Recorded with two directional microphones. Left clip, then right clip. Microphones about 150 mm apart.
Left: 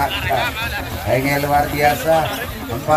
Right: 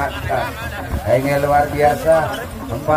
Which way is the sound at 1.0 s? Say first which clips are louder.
Right 3 dB; 5° right (ahead or behind).